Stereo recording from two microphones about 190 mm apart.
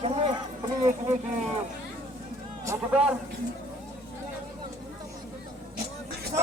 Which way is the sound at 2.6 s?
10° right (ahead or behind).